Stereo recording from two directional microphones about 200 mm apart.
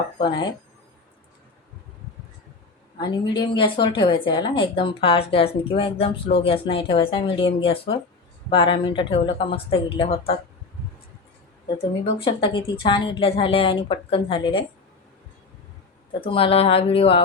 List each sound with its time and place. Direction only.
0.2 s a woman's voice: 25° left (ahead or behind)
3.0 s a woman's voice: 20° left (ahead or behind)
12.2 s a woman's voice: 25° left (ahead or behind)
16.2 s a woman's voice: 25° left (ahead or behind)